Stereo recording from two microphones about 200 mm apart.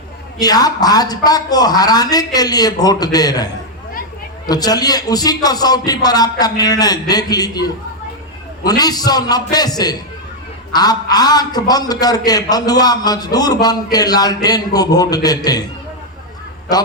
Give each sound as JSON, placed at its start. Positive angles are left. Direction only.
{"t": 0.3, "sound": "a man's voice", "side_deg": 20}